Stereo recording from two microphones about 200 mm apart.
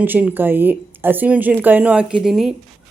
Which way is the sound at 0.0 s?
10° right (ahead or behind).